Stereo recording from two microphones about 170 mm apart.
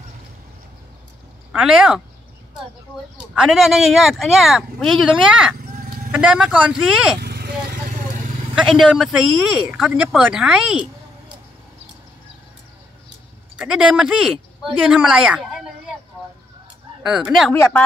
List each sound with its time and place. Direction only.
1.5 s speech: 5° right (ahead or behind)
3.2 s speech: 5° right (ahead or behind)
7.2 s vehicle: 70° right (ahead or behind)
8.5 s speech: centre (ahead or behind)
13.6 s a woman's voice: 5° right (ahead or behind)
17.0 s speech: 5° right (ahead or behind)
17.5 s speech: 10° left (ahead or behind)